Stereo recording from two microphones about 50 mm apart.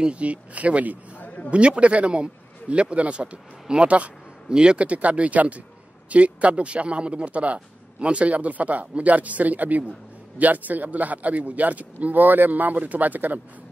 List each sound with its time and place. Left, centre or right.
0.0 s speech: right
1.2 s a sound: left
1.5 s a man's voice: right